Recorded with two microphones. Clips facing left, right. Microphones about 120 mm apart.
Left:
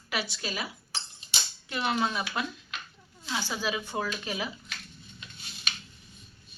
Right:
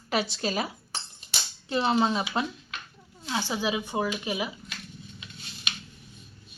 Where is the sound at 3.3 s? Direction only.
20° right (ahead or behind).